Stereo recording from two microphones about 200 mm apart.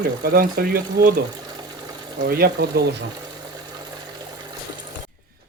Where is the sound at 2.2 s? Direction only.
50° right (ahead or behind).